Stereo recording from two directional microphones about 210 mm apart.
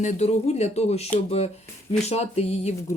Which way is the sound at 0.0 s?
35° left (ahead or behind).